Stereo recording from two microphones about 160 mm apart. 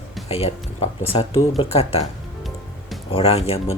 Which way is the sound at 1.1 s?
35° left (ahead or behind).